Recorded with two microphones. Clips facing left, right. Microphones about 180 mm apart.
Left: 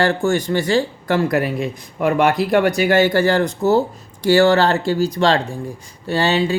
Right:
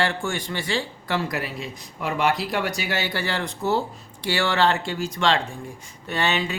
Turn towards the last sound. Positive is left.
turn(degrees=35)  # may be behind; listen again after turning